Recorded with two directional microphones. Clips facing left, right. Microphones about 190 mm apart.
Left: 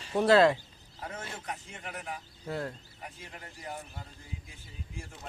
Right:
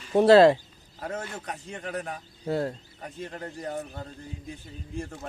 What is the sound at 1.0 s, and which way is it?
Speech, 65° right (ahead or behind).